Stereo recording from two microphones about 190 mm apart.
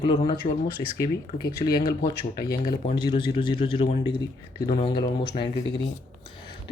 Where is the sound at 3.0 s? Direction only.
25° left (ahead or behind).